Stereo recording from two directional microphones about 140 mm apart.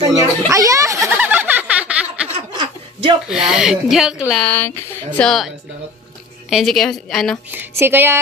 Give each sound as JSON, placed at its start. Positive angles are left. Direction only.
{"t": 0.5, "sound": "a sound", "side_deg": -25}
{"t": 2.3, "sound": "chuckle", "side_deg": -40}
{"t": 3.3, "sound": "speech", "side_deg": -5}
{"t": 4.3, "sound": "speech", "side_deg": 10}
{"t": 6.5, "sound": "speech", "side_deg": 0}
{"t": 7.5, "sound": "speech", "side_deg": -15}